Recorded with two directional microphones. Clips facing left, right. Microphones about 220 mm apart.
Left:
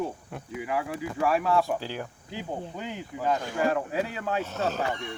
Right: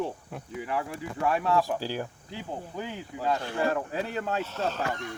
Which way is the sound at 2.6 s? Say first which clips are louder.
Even; 20° left (ahead or behind).